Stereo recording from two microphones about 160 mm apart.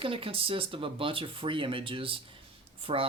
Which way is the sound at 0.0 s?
35° right (ahead or behind).